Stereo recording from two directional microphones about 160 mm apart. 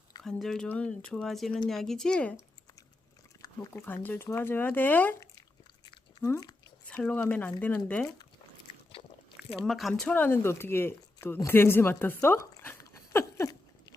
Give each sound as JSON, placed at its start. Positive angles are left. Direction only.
{"t": 0.3, "sound": "speech", "side_deg": 0}
{"t": 3.4, "sound": "speech", "side_deg": 15}
{"t": 6.8, "sound": "speech", "side_deg": 5}
{"t": 9.6, "sound": "speech", "side_deg": 0}
{"t": 13.1, "sound": "patter", "side_deg": 20}